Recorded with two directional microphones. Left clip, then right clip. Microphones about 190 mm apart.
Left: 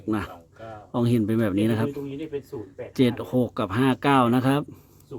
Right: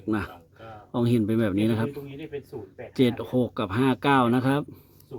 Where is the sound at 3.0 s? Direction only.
Centre (ahead or behind).